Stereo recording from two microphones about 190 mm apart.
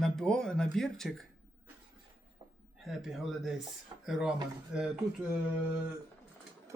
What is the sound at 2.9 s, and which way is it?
Speech, centre (ahead or behind).